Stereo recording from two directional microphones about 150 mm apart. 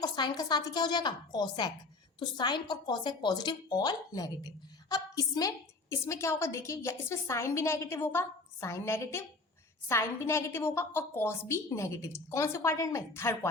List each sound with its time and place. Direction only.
0.0 s a woman's voice: 30° left (ahead or behind)